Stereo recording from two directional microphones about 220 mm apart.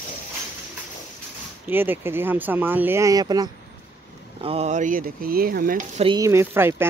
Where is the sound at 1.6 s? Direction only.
10° right (ahead or behind).